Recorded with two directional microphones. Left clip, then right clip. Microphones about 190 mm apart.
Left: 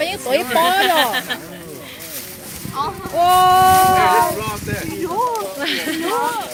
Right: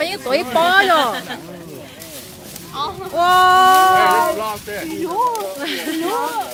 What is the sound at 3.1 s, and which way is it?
Speech, centre (ahead or behind).